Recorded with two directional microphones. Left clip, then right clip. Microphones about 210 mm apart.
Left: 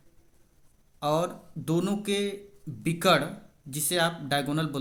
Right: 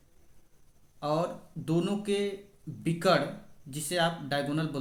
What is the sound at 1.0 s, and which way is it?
Speech, 40° left (ahead or behind).